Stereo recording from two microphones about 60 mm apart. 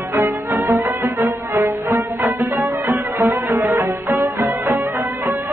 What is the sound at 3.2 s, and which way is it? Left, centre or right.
Music, right.